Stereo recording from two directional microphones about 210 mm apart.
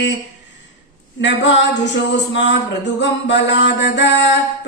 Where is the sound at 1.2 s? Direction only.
60° left (ahead or behind).